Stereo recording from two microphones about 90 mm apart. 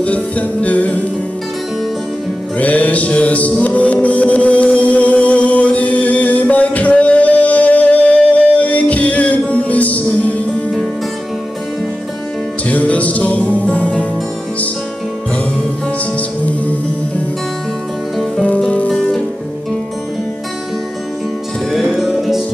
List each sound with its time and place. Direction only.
0.0 s music: 15° left (ahead or behind)
2.6 s music: 15° left (ahead or behind)
12.6 s music: 15° left (ahead or behind)
16.2 s music: 15° left (ahead or behind)
18.3 s music: 15° left (ahead or behind)
21.7 s music: centre (ahead or behind)